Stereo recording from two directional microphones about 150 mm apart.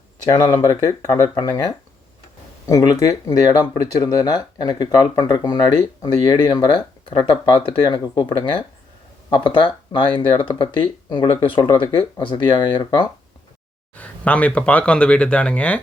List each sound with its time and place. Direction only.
0.3 s speech: 30° left (ahead or behind)
13.9 s speech: 10° left (ahead or behind)